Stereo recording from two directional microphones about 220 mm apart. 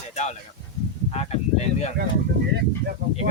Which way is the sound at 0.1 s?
30° left (ahead or behind).